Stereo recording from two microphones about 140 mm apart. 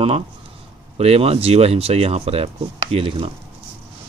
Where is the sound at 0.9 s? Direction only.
45° right (ahead or behind).